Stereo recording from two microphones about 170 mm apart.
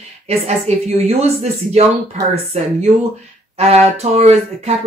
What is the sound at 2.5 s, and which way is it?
Speech, 40° right (ahead or behind).